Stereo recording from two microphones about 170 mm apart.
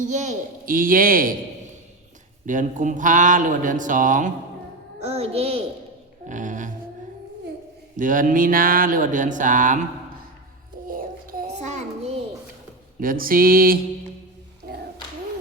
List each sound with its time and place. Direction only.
0.0 s speech: 45° right (ahead or behind)
2.5 s mantra: 50° right (ahead or behind)
4.9 s a child's voice: 35° right (ahead or behind)
6.2 s mantra: 50° right (ahead or behind)
7.9 s mantra: 50° right (ahead or behind)
10.8 s a sound: 55° right (ahead or behind)
11.5 s child singing: 45° right (ahead or behind)
13.0 s speech: 55° right (ahead or behind)
14.6 s a sound: 60° right (ahead or behind)